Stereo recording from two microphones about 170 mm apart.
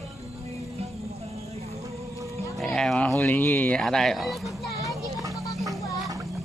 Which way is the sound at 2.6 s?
Centre (ahead or behind).